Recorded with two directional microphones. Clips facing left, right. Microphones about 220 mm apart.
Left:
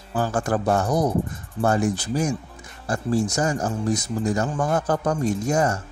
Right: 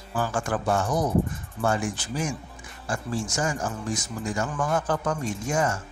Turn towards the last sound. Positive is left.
turn(degrees=40)  # may be behind; listen again after turning